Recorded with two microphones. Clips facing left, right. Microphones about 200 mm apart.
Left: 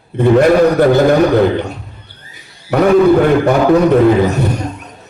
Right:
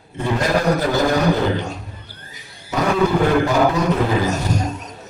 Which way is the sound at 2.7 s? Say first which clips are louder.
Left 9 dB; 60° left (ahead or behind).